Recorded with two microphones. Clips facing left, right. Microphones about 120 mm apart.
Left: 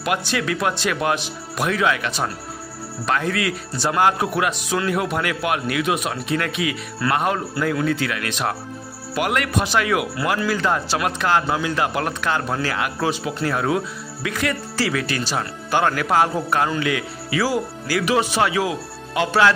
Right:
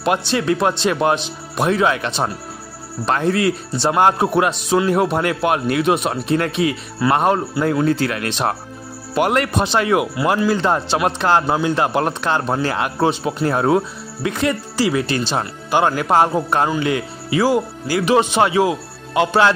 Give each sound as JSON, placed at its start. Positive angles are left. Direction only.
{"t": 0.0, "sound": "a man's voice", "side_deg": -30}